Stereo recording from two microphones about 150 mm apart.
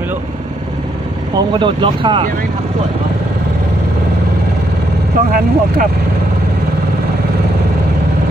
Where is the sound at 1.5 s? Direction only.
30° right (ahead or behind).